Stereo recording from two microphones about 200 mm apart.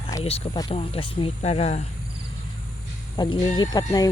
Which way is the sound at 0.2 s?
30° left (ahead or behind).